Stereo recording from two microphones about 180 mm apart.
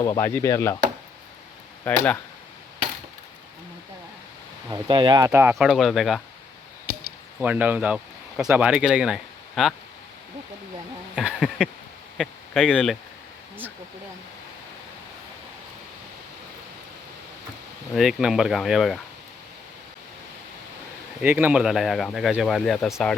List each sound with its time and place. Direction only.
0.0 s speech: 15° left (ahead or behind)
1.9 s speech: 10° left (ahead or behind)
4.7 s speech: 25° right (ahead or behind)
5.3 s speech: 10° right (ahead or behind)
5.5 s speech: centre (ahead or behind)
7.3 s speech: 5° right (ahead or behind)
11.1 s a sound: 5° right (ahead or behind)
12.1 s speech: centre (ahead or behind)
17.9 s speech: centre (ahead or behind)
21.2 s speech: 10° right (ahead or behind)